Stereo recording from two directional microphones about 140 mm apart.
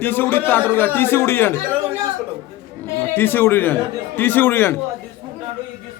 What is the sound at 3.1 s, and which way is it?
A man's voice, 15° left (ahead or behind).